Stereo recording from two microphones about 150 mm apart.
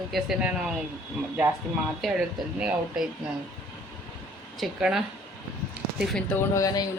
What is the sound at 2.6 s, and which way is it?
Speech, 5° right (ahead or behind).